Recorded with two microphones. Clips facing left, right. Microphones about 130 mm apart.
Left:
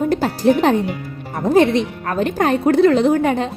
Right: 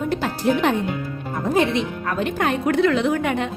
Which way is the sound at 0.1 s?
35° left (ahead or behind).